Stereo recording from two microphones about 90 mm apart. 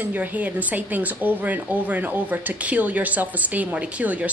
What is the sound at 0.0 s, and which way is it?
Speech, 20° right (ahead or behind).